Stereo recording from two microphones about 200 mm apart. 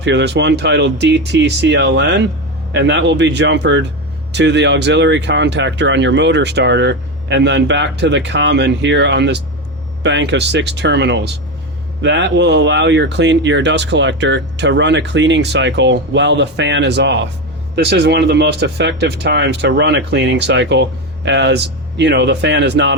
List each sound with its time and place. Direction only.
0.0 s speech: 60° right (ahead or behind)